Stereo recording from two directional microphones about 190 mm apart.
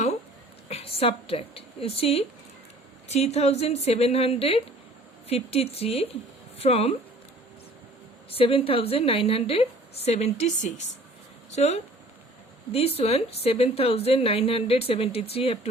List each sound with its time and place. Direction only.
0.7 s a woman's voice: 30° left (ahead or behind)
8.3 s a woman's voice: 30° left (ahead or behind)
13.0 s a woman's voice: 30° left (ahead or behind)